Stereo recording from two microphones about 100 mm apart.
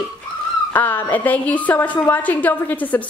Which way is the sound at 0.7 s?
20° left (ahead or behind).